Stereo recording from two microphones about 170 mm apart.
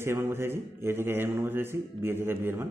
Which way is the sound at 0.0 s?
15° right (ahead or behind).